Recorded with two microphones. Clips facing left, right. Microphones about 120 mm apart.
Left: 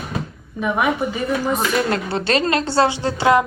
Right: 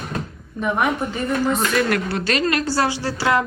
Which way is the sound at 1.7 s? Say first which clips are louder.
Even; 25° left (ahead or behind).